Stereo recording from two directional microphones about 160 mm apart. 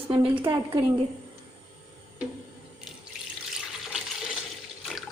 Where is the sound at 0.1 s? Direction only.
35° right (ahead or behind).